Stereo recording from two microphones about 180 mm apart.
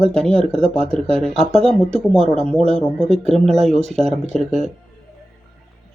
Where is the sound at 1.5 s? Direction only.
35° right (ahead or behind).